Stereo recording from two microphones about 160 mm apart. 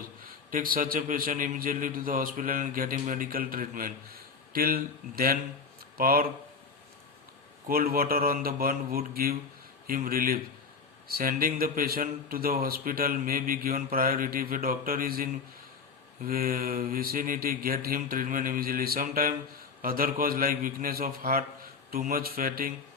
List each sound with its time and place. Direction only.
0.3 s speech: 60° right (ahead or behind)
7.7 s speech: 65° right (ahead or behind)